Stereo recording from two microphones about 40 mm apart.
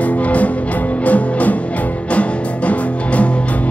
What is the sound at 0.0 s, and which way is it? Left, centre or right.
Music, left.